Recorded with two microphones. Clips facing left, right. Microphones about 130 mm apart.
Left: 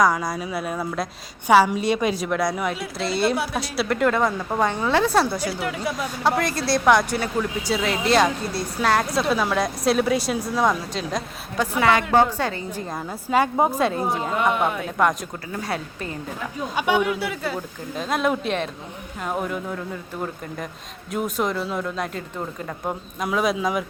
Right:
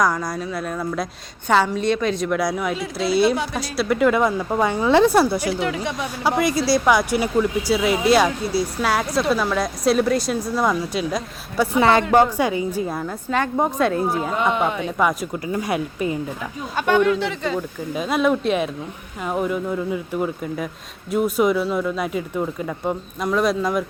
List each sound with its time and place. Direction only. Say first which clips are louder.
0.0 s speech: left 1 dB; centre (ahead or behind)
5.5 s speech: right 2 dB; 5° left (ahead or behind)
11.8 s a woman's voice: right 3 dB; 30° right (ahead or behind)
12.1 s a woman's voice: right 3 dB; 10° right (ahead or behind)
13.0 s speech: left 1 dB; 5° left (ahead or behind); by 16.1 s 15° right (ahead or behind)
16.7 s speech: right 4 dB; 10° left (ahead or behind)
17.9 s speech: right 3 dB; 5° right (ahead or behind)